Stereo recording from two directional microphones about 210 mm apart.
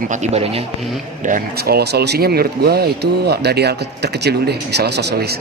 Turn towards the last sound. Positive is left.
turn(degrees=-50)  # may be behind; listen again after turning